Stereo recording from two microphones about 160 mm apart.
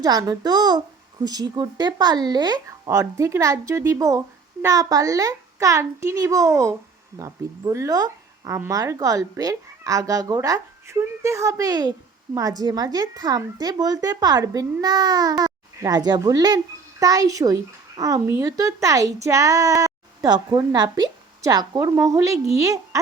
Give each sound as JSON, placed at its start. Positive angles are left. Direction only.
{"t": 0.0, "sound": "speech", "side_deg": -25}